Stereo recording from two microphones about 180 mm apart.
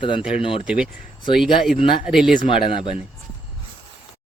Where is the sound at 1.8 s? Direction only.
30° left (ahead or behind).